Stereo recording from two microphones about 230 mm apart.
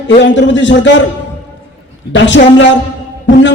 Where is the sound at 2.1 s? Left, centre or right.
Left.